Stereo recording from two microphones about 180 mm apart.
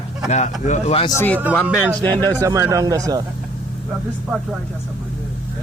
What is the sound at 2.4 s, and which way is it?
Speech, 15° right (ahead or behind).